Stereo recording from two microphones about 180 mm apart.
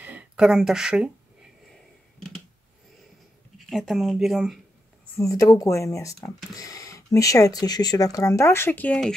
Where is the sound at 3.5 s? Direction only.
Centre (ahead or behind).